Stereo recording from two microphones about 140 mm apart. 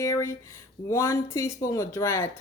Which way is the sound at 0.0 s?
20° left (ahead or behind).